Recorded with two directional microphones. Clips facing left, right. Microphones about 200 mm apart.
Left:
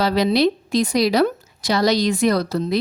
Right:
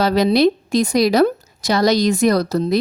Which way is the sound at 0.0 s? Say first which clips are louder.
Right 3 dB; 45° right (ahead or behind).